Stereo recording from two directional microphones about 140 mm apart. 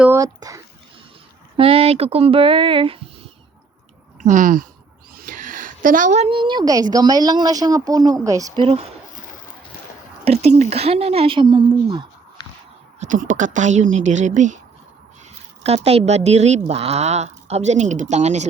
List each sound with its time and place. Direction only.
0.2 s speech: 25° right (ahead or behind)
1.5 s speech: 45° right (ahead or behind)
4.2 s speech: 65° right (ahead or behind)
5.1 s a sound: 80° right; by 6.3 s 55° right (ahead or behind)
6.3 s speech: 35° right (ahead or behind)
8.6 s speech: 50° right (ahead or behind)
10.2 s speech: 50° right (ahead or behind); by 12.0 s 35° right (ahead or behind)
13.0 s speech: 65° right (ahead or behind)
15.6 s speech: 45° right (ahead or behind)